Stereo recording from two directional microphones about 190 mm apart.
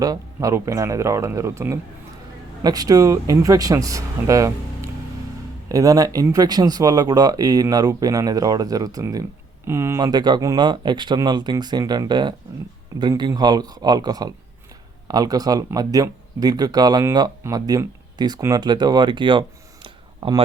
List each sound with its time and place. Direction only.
0.0 s speech: 20° right (ahead or behind)